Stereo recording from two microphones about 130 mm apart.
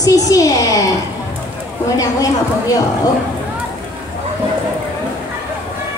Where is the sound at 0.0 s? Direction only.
25° left (ahead or behind).